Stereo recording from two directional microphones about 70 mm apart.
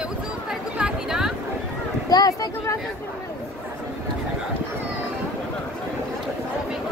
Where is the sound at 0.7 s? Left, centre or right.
Centre.